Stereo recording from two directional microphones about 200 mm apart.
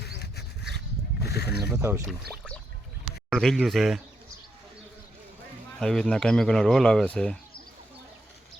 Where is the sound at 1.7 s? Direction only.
10° right (ahead or behind).